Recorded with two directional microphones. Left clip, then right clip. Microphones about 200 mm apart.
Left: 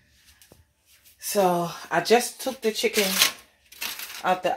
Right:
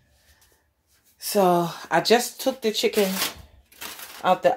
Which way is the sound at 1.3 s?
25° right (ahead or behind).